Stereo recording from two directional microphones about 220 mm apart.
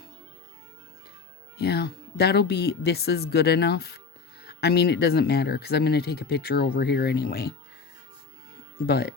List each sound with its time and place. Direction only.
1.5 s speech: 45° left (ahead or behind)
8.9 s speech: 45° left (ahead or behind)